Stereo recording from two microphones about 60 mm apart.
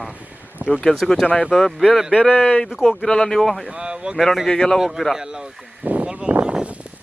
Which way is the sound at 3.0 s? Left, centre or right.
Centre.